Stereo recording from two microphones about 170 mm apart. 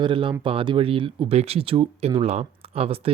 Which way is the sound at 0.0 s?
30° right (ahead or behind).